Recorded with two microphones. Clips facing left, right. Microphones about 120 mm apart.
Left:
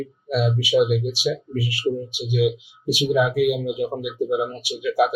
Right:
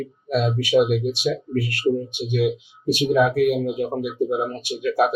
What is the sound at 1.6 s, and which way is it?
Speech, 60° right (ahead or behind).